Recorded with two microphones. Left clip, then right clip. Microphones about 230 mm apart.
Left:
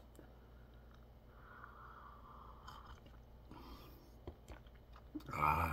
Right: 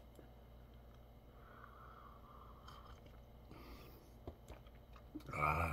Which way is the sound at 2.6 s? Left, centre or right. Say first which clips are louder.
Left 3 dB; centre.